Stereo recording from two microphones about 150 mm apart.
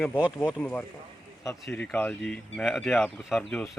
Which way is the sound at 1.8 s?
10° left (ahead or behind).